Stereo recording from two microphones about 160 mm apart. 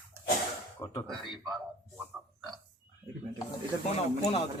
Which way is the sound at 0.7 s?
20° left (ahead or behind).